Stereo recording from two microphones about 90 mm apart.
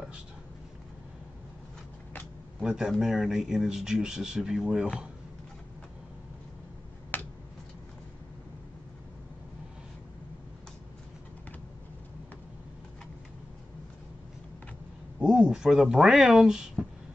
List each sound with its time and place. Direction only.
2.6 s speech: 10° right (ahead or behind)
7.1 s a sound: 20° left (ahead or behind)
15.1 s speech: 10° right (ahead or behind)